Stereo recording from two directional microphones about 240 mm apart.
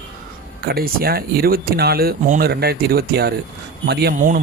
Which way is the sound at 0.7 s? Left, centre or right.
Right.